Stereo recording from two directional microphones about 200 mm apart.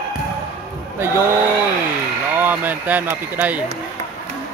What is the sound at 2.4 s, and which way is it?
Speech, 10° right (ahead or behind).